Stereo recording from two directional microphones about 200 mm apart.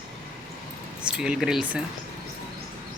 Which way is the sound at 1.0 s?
5° right (ahead or behind).